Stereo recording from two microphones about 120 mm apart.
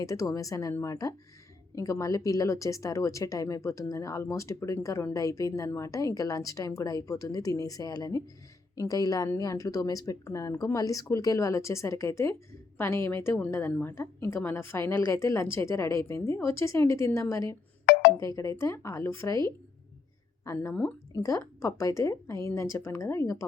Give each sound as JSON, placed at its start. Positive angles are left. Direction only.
{"t": 0.0, "sound": "speech", "side_deg": 25}